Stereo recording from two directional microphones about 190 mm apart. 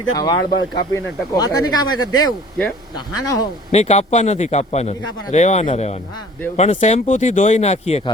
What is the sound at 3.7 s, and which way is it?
Speech, 35° left (ahead or behind).